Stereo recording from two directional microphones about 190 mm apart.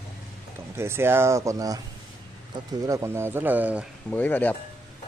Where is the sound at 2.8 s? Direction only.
15° right (ahead or behind).